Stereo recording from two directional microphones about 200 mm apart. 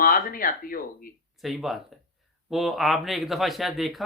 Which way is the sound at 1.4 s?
Centre (ahead or behind).